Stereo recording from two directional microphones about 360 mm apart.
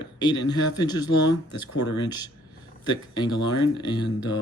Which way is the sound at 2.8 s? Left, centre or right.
Centre.